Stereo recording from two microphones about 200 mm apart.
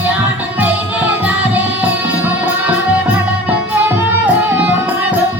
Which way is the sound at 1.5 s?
5° right (ahead or behind).